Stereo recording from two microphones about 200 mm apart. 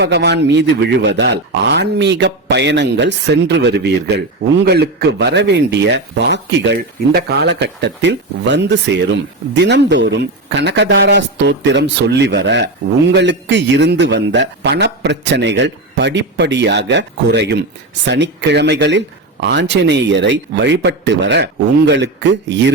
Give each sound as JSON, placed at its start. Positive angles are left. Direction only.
{"t": 0.0, "sound": "speech", "side_deg": -60}